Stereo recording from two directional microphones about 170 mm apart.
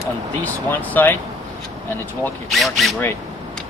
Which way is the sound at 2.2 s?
Centre (ahead or behind).